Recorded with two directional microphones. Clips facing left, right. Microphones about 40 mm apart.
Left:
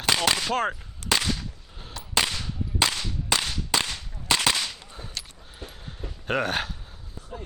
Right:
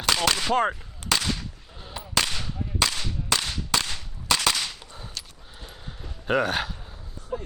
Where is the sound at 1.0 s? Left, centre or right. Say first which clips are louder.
Even; centre.